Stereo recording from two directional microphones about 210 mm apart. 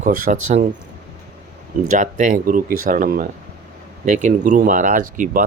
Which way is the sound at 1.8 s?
40° right (ahead or behind).